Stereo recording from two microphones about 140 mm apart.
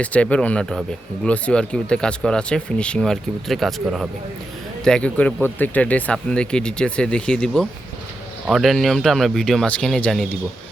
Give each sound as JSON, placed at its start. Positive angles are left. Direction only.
{"t": 0.0, "sound": "speech", "side_deg": 10}